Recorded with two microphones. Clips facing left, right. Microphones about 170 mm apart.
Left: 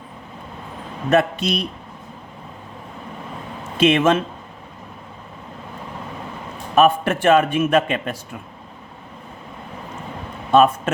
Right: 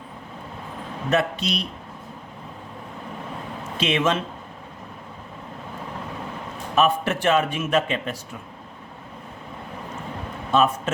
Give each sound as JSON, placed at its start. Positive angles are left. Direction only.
{"t": 1.1, "sound": "speech", "side_deg": 50}
{"t": 3.8, "sound": "speech", "side_deg": 50}
{"t": 6.7, "sound": "speech", "side_deg": 50}
{"t": 10.5, "sound": "speech", "side_deg": 55}